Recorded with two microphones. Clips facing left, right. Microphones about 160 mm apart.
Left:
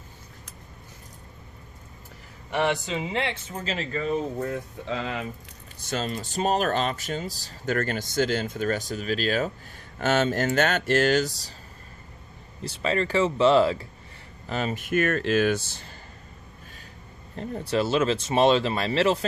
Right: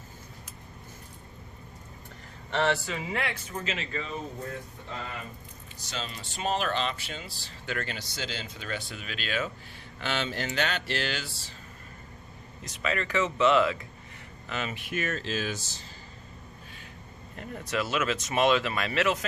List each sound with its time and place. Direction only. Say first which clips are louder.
2.5 s speech: left 2 dB; 15° left (ahead or behind); by 4.1 s 40° left (ahead or behind)
4.9 s speech: left 9 dB; 90° left
5.8 s speech: left 9 dB; 50° left (ahead or behind)
12.6 s speech: left 6 dB; 30° left (ahead or behind); by 15.9 s 60° left (ahead or behind)
17.3 s speech: left 6 dB; 30° left (ahead or behind)